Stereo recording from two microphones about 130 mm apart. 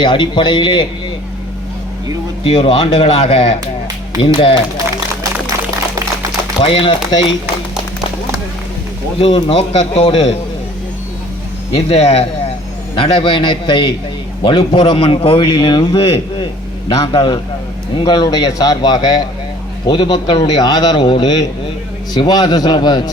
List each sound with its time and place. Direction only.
0.0 s a man's voice: 35° left (ahead or behind)
2.4 s a man's voice: 45° left (ahead or behind)
6.6 s a man's voice: 40° left (ahead or behind)
9.1 s speech: 45° left (ahead or behind)
11.7 s speech: 50° left (ahead or behind)
13.0 s a man's voice: 40° left (ahead or behind)